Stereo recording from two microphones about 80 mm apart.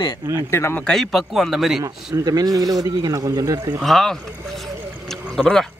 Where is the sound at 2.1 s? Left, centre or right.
Right.